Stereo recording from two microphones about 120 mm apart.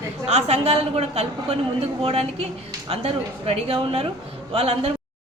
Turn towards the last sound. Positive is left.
turn(degrees=-55)  # may be behind; listen again after turning